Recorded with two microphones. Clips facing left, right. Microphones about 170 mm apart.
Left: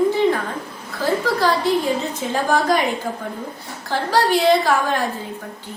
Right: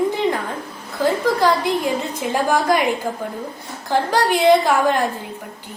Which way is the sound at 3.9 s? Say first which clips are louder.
Even; 15° right (ahead or behind).